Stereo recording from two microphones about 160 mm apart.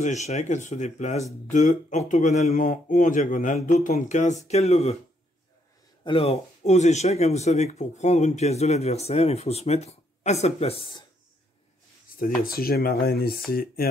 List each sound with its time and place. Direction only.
0.0 s speech: 45° left (ahead or behind)
6.0 s speech: 35° left (ahead or behind)
12.2 s speech: 65° left (ahead or behind)